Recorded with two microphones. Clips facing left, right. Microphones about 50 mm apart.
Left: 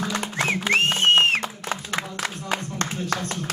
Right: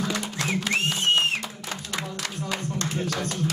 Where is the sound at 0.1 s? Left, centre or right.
Left.